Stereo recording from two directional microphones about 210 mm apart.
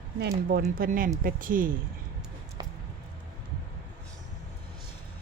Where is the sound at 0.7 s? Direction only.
40° right (ahead or behind).